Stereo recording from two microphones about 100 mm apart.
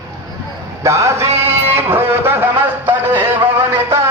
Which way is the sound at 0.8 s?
30° right (ahead or behind).